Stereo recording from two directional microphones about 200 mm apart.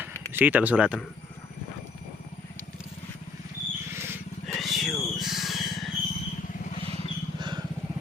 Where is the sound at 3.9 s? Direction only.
10° right (ahead or behind).